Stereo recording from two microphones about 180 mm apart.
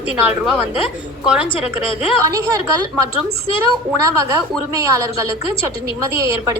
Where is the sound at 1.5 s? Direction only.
30° left (ahead or behind).